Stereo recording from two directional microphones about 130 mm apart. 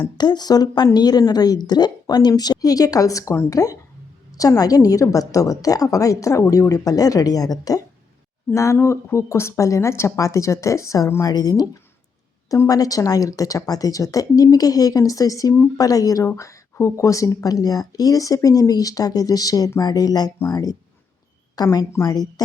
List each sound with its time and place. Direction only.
0.0 s a woman's voice: 35° left (ahead or behind)